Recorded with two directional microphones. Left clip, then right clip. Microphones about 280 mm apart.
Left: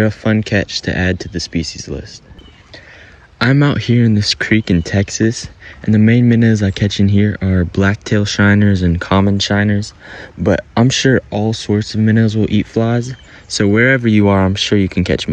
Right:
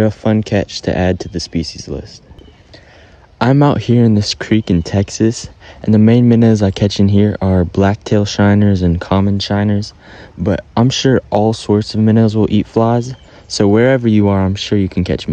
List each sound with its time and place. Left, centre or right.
0.0 s speech: centre
3.3 s speech: centre